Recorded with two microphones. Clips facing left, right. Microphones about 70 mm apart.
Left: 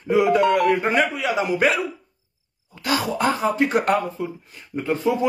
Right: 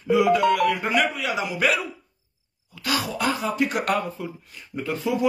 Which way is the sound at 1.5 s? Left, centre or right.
Left.